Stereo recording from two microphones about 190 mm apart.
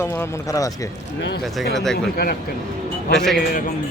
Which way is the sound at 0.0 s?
15° left (ahead or behind).